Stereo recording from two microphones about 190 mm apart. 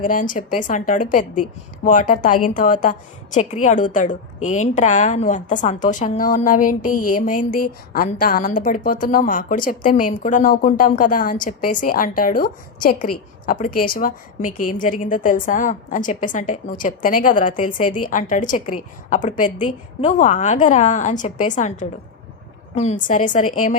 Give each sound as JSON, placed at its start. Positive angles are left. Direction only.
{"t": 0.0, "sound": "a woman's voice", "side_deg": 45}